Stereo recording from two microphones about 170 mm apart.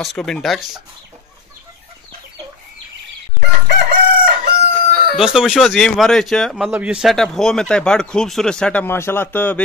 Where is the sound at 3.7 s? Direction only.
65° right (ahead or behind).